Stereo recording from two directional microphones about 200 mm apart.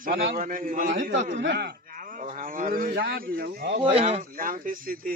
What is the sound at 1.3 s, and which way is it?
Speech, 60° right (ahead or behind).